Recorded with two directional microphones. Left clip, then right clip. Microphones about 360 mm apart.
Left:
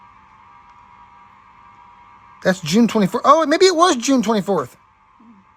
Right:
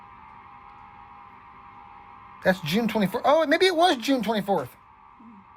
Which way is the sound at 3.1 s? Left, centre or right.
Left.